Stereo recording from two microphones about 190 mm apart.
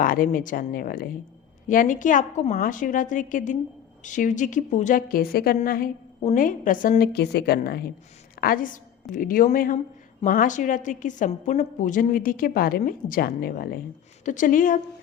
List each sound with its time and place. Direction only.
0.0 s a woman's voice: 45° left (ahead or behind)